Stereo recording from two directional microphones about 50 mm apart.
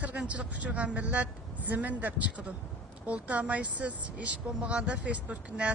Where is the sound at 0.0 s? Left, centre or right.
Right.